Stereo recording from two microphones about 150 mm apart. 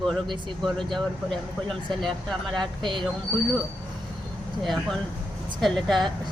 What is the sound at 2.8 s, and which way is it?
Speech, 30° right (ahead or behind).